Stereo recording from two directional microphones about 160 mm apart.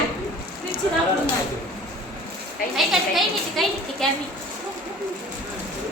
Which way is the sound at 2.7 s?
Centre (ahead or behind).